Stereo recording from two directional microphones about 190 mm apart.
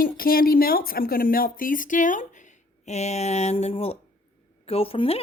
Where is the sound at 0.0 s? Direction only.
50° left (ahead or behind).